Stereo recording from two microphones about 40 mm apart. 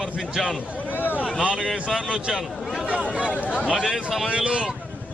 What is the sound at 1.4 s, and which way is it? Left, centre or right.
A man's voice, right.